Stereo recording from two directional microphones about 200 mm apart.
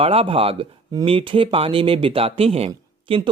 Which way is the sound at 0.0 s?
30° right (ahead or behind).